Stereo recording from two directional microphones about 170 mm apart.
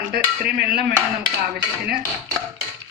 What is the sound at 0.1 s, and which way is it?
Speech, 65° right (ahead or behind).